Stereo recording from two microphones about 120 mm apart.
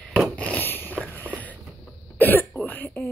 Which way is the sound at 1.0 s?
15° left (ahead or behind).